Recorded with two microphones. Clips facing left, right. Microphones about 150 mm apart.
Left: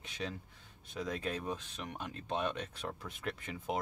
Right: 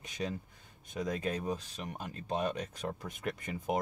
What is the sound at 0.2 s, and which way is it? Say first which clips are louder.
Speech: right 4 dB; 30° right (ahead or behind).